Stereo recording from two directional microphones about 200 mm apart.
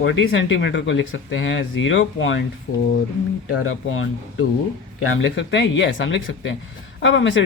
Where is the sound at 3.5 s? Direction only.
85° left.